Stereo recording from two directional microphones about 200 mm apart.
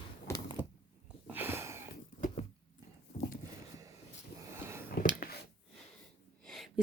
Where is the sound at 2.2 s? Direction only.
35° left (ahead or behind).